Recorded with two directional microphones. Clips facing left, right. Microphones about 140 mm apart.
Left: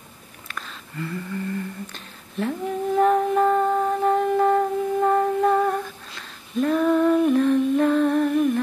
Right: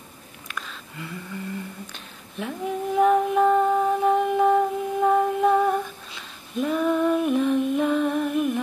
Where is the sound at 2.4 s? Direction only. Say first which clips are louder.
Left 3 dB; 5° right (ahead or behind).